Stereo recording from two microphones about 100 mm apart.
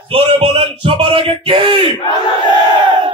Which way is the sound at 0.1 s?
70° right (ahead or behind).